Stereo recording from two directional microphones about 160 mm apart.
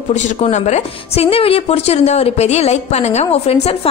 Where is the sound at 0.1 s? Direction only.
45° left (ahead or behind).